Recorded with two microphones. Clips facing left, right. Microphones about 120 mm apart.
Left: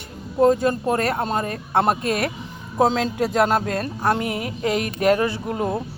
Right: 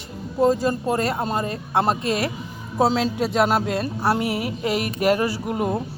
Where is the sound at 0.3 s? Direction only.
5° right (ahead or behind).